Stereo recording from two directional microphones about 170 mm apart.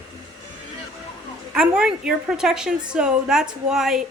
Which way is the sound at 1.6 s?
5° right (ahead or behind).